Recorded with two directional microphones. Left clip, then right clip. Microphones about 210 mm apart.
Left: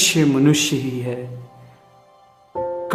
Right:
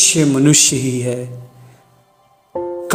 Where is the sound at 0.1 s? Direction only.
15° right (ahead or behind).